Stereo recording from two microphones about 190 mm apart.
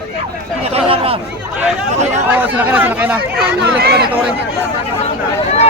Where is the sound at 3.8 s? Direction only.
55° right (ahead or behind).